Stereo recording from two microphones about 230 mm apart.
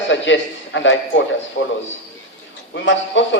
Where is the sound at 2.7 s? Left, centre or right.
Left.